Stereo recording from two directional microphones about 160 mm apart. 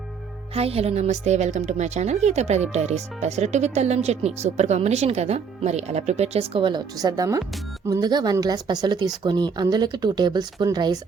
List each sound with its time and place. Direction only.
0.5 s a woman's voice: 40° right (ahead or behind)